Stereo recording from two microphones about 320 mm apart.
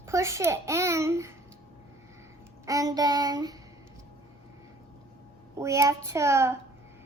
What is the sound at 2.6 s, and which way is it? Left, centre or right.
Speech, centre.